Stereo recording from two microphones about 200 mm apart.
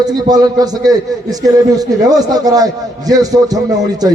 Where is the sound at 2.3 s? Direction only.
20° right (ahead or behind).